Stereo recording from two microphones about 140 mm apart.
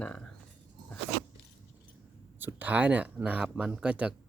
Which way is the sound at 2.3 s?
15° right (ahead or behind).